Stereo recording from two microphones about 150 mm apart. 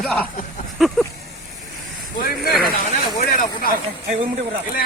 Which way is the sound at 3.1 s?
65° left (ahead or behind).